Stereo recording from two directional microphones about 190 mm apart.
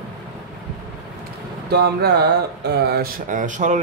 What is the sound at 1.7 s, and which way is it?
Speech, 55° right (ahead or behind).